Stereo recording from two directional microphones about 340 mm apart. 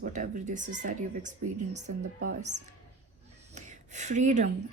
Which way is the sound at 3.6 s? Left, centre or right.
Right.